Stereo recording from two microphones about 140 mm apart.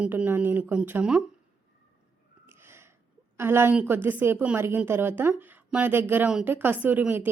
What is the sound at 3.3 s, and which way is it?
Speech, 15° right (ahead or behind).